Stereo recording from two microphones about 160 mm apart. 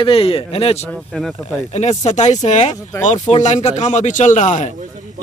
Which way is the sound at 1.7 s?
45° left (ahead or behind).